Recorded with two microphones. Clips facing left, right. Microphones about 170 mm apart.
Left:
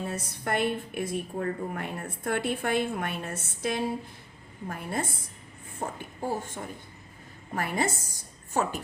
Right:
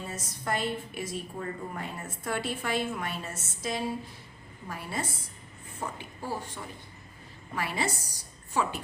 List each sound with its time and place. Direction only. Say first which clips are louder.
0.1 s a woman's voice: left 2 dB; 60° left (ahead or behind)